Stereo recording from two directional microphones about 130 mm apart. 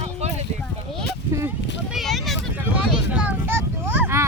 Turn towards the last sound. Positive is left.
turn(degrees=-15)  # may be behind; listen again after turning